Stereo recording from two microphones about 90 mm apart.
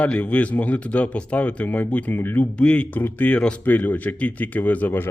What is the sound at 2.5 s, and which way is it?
Speech, 10° left (ahead or behind).